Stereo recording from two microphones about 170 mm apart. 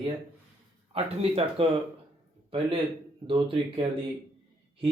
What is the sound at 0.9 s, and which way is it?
Speech, 35° right (ahead or behind).